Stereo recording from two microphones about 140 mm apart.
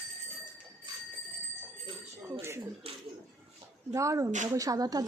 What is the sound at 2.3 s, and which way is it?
Speech, 20° right (ahead or behind).